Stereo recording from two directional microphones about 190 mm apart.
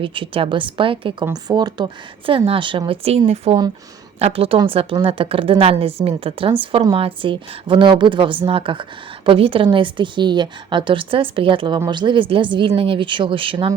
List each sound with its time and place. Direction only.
0.0 s a woman's voice: 25° right (ahead or behind)